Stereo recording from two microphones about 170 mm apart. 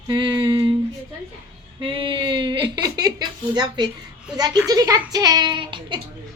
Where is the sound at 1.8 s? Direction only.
30° right (ahead or behind).